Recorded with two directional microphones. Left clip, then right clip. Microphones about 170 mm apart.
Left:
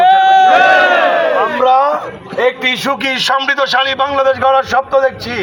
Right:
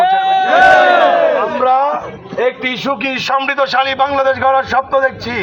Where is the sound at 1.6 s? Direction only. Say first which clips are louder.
Left 3 dB; 35° left (ahead or behind).